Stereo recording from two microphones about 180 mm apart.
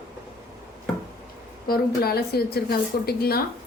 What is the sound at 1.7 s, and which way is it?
Speech, 60° left (ahead or behind).